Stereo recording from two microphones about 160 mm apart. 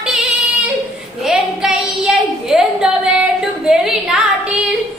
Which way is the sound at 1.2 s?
5° right (ahead or behind).